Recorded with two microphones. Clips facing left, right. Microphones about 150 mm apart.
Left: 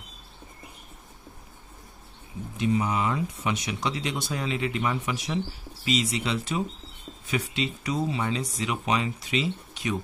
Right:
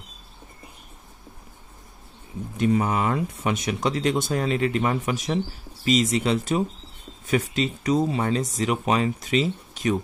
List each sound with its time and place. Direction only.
2.5 s speech: 50° right (ahead or behind)